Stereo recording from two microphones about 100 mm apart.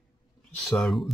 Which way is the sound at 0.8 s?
Centre (ahead or behind).